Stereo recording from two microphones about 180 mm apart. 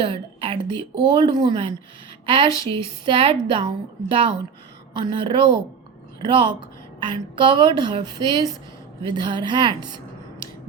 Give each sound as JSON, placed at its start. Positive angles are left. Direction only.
{"t": 0.0, "sound": "a woman's voice", "side_deg": -30}